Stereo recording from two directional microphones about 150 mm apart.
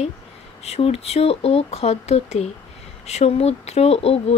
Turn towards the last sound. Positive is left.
turn(degrees=40)  # may be behind; listen again after turning